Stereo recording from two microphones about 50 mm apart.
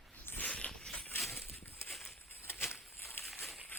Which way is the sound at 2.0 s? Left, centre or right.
Left.